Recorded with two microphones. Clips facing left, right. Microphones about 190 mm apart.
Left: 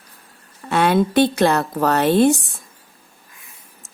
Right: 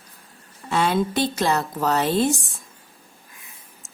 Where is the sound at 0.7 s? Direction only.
60° left (ahead or behind).